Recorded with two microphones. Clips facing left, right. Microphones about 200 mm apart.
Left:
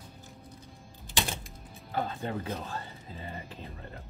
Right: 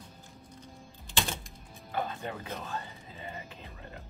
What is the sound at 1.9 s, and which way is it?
Music, 30° left (ahead or behind).